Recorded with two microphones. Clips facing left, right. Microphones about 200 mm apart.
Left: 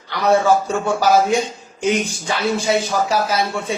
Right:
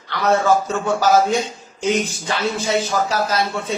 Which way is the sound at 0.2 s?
15° left (ahead or behind).